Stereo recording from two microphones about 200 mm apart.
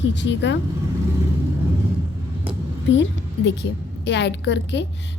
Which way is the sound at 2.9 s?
65° left (ahead or behind).